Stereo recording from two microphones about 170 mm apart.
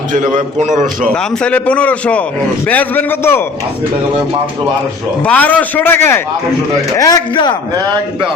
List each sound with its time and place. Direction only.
0.1 s a man's voice: 50° right (ahead or behind)
1.1 s a man's voice: 5° left (ahead or behind)
5.2 s a man's voice: 10° left (ahead or behind)
7.0 s a man's voice: 25° left (ahead or behind)